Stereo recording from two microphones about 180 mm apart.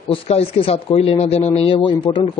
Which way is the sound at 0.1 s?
30° left (ahead or behind).